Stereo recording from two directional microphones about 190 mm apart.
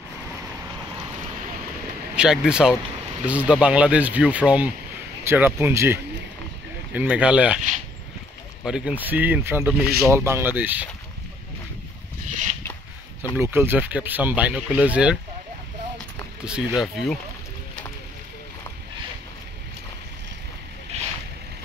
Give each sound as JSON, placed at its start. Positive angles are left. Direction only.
{"t": 2.1, "sound": "speech", "side_deg": -5}
{"t": 8.6, "sound": "speech", "side_deg": -5}
{"t": 13.4, "sound": "speech", "side_deg": -10}
{"t": 16.4, "sound": "speech", "side_deg": -5}
{"t": 20.9, "sound": "boat", "side_deg": -35}